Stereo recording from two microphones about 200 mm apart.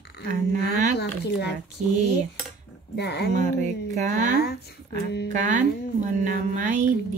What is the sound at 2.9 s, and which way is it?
Speech, 55° left (ahead or behind).